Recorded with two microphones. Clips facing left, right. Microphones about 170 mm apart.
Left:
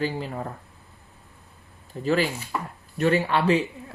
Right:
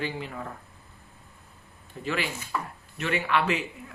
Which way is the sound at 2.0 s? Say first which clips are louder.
Left 7 dB; 35° left (ahead or behind).